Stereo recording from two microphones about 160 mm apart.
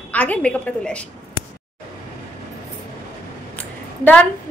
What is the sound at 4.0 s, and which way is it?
Speech, 10° left (ahead or behind).